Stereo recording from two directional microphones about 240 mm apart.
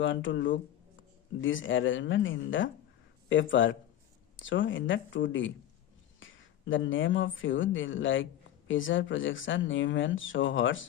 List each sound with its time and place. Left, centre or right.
0.0 s speech: left